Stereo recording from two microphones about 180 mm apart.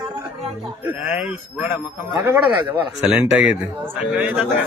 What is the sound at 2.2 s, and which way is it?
Speech, 10° right (ahead or behind).